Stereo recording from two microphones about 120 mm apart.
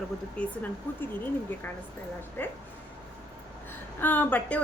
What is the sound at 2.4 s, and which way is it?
Speech, 20° left (ahead or behind).